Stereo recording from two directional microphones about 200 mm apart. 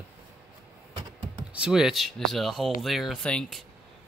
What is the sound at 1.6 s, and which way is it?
Speech, 5° right (ahead or behind).